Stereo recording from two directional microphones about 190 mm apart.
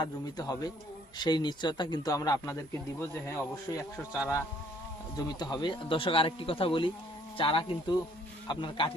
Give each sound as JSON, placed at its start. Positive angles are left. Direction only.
{"t": 0.0, "sound": "speech", "side_deg": 20}